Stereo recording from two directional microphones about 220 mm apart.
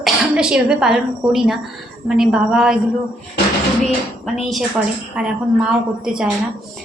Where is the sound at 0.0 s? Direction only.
5° right (ahead or behind).